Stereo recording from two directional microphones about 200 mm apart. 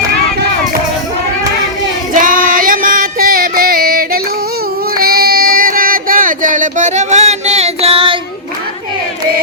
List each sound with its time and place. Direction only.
2.1 s female singing: 45° right (ahead or behind)
4.9 s child singing: 50° right (ahead or behind); by 8.2 s 25° right (ahead or behind)